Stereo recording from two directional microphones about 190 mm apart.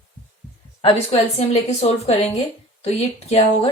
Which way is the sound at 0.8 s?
30° left (ahead or behind).